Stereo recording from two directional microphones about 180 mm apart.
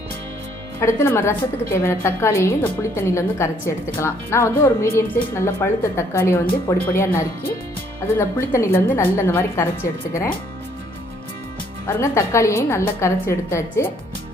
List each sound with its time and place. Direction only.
0.8 s a woman's voice: 15° left (ahead or behind)
11.9 s a woman's voice: 15° left (ahead or behind)